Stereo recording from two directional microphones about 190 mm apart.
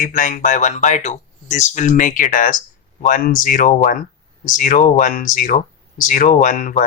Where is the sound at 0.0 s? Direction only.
45° left (ahead or behind).